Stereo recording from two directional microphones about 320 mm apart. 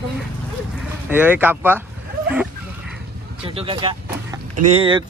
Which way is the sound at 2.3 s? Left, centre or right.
Centre.